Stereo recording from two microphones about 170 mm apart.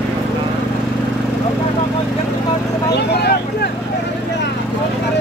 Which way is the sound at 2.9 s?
75° left (ahead or behind).